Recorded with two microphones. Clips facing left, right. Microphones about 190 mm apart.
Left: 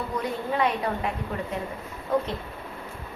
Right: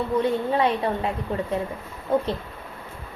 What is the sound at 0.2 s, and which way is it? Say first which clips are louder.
Speech: right 3 dB; 30° right (ahead or behind).